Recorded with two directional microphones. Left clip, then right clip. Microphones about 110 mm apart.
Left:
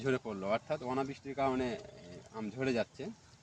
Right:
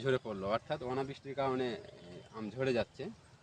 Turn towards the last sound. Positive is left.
turn(degrees=-30)  # may be behind; listen again after turning